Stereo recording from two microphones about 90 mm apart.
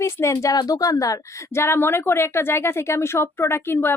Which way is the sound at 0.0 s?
30° left (ahead or behind).